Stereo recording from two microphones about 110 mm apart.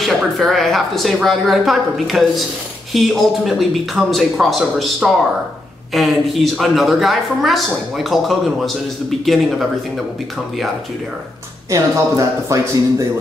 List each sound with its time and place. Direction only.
0.0 s a woman's voice: centre (ahead or behind)
11.7 s speech: 30° right (ahead or behind)